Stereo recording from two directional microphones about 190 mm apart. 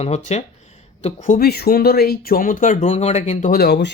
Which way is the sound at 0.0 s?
35° left (ahead or behind).